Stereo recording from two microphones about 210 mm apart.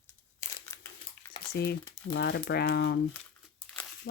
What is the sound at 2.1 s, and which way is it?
Speech, 55° left (ahead or behind).